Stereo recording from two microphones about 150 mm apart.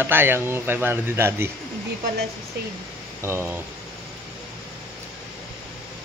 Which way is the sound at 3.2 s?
15° right (ahead or behind).